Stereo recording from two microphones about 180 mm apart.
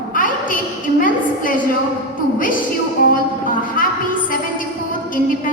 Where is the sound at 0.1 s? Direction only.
50° left (ahead or behind).